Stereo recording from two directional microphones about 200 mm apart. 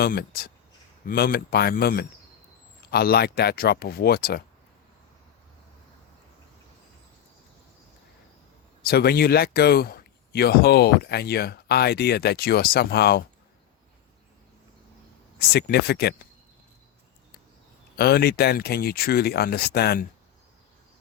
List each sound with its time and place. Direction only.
0.0 s speech: 50° left (ahead or behind)
8.8 s speech: 50° left (ahead or behind)
15.4 s speech: 50° left (ahead or behind)
17.9 s speech: 50° left (ahead or behind)